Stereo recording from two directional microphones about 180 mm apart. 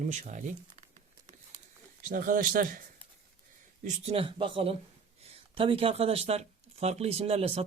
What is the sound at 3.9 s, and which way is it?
Speech, 35° right (ahead or behind).